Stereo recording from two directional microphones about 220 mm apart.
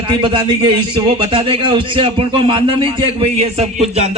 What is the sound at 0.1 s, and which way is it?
A man's voice, 20° right (ahead or behind).